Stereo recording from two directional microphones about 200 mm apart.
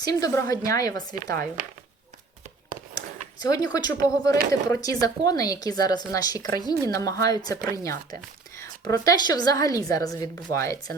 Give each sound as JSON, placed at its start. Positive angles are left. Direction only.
{"t": 0.0, "sound": "speech", "side_deg": 15}
{"t": 3.5, "sound": "speech", "side_deg": 20}